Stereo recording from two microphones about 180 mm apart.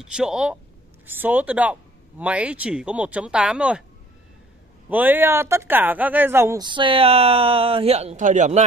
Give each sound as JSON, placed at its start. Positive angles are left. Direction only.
{"t": 0.0, "sound": "speech", "side_deg": -5}
{"t": 4.8, "sound": "speech", "side_deg": -10}